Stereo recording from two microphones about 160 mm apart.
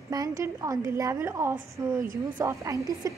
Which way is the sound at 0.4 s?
20° right (ahead or behind).